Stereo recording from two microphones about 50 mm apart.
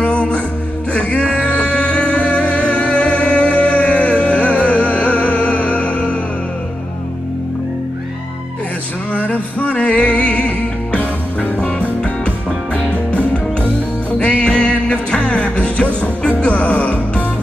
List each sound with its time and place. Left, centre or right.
0.0 s music: left
9.1 s music: left